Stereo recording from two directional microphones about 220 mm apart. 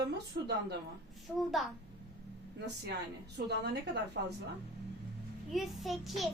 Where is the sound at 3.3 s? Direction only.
50° right (ahead or behind).